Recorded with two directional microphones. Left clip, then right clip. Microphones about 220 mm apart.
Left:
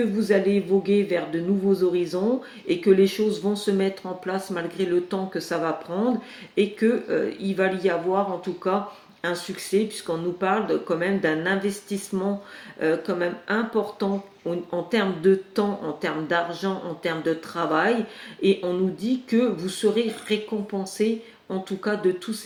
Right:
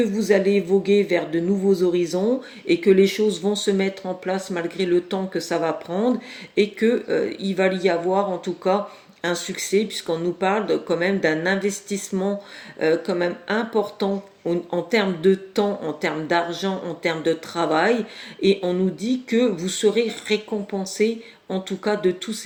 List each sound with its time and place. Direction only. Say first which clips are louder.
0.2 s speech: right 3 dB; 40° right (ahead or behind)
9.2 s speech: right 3 dB; 45° right (ahead or behind)